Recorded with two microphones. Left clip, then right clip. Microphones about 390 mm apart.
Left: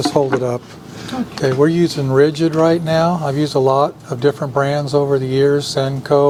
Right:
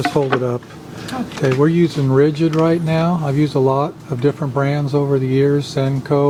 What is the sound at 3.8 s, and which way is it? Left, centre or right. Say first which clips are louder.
Speech: left 3 dB; left.